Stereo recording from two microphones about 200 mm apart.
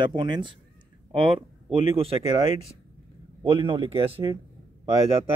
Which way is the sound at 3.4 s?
25° right (ahead or behind).